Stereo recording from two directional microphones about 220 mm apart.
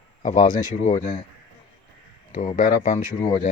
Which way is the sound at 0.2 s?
35° left (ahead or behind).